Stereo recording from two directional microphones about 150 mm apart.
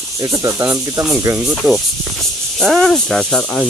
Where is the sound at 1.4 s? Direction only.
Centre (ahead or behind).